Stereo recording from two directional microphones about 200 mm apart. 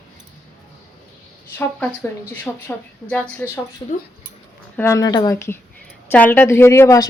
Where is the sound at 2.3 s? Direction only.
10° left (ahead or behind).